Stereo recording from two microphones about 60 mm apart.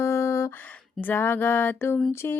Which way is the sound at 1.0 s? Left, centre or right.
Left.